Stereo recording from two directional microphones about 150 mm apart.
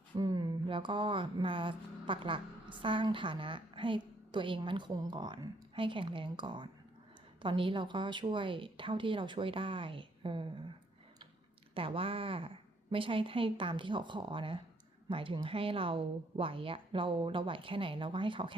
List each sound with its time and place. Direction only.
0.2 s a woman's voice: 25° right (ahead or behind)
11.7 s a woman's voice: 35° right (ahead or behind)